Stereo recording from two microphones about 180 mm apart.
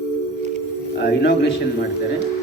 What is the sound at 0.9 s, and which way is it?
Speech, 65° left (ahead or behind).